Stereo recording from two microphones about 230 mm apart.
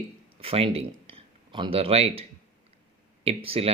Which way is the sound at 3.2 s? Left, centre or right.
Right.